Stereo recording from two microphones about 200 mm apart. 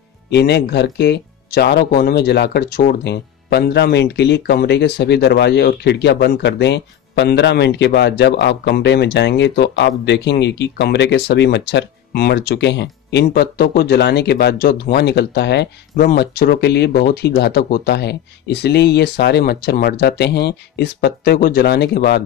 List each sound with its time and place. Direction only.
0.3 s speech: 55° left (ahead or behind)